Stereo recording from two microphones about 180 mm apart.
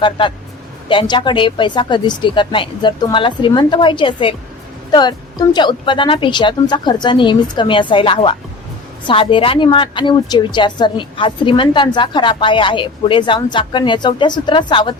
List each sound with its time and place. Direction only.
0.0 s a woman's voice: 25° left (ahead or behind)